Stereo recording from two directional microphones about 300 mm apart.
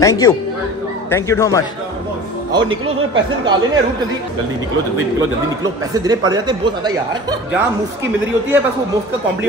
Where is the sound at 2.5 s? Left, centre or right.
Centre.